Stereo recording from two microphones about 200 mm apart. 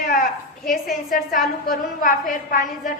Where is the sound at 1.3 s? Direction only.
Centre (ahead or behind).